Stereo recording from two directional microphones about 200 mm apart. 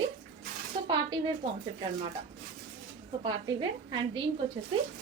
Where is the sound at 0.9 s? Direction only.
25° right (ahead or behind).